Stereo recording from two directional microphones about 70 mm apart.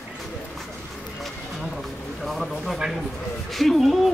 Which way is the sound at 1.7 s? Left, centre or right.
Centre.